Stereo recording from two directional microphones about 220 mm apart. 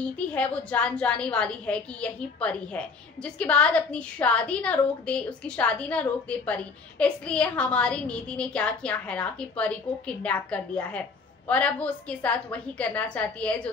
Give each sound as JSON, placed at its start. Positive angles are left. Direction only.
{"t": 0.0, "sound": "a woman's voice", "side_deg": 5}